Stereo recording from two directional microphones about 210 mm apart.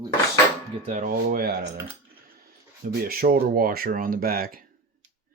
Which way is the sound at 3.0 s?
45° right (ahead or behind).